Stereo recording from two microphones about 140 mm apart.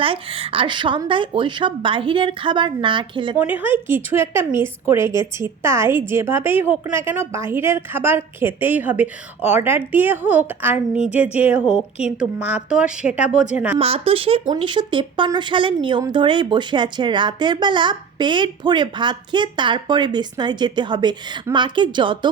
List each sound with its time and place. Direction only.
0.0 s speech: 40° right (ahead or behind)
3.3 s a woman's voice: 10° right (ahead or behind)
13.7 s speech: 45° right (ahead or behind)